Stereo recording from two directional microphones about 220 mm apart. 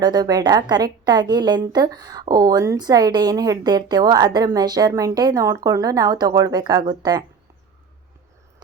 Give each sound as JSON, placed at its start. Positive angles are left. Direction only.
{"t": 0.0, "sound": "a woman's voice", "side_deg": -20}